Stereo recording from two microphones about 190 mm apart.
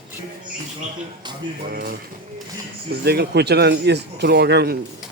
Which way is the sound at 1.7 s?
50° right (ahead or behind).